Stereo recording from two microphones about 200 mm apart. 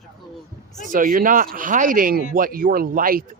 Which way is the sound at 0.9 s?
45° right (ahead or behind).